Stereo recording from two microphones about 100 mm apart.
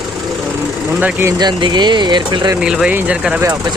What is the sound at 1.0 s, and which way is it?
Speech, 20° right (ahead or behind).